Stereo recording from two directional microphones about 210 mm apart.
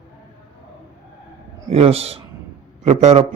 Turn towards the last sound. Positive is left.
turn(degrees=-30)  # may be behind; listen again after turning